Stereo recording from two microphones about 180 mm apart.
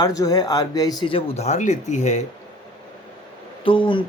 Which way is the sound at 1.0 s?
30° left (ahead or behind).